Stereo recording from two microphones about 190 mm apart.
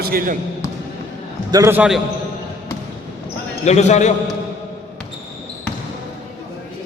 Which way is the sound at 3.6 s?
35° left (ahead or behind).